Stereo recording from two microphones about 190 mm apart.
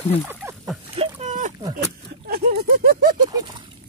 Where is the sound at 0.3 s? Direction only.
10° right (ahead or behind).